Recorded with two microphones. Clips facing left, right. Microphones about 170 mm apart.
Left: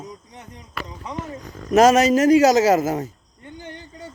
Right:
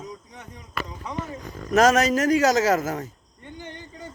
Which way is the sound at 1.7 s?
10° left (ahead or behind).